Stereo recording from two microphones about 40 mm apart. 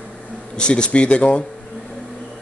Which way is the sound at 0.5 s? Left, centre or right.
Left.